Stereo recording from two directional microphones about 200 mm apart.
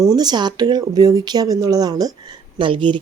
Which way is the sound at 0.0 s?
20° right (ahead or behind).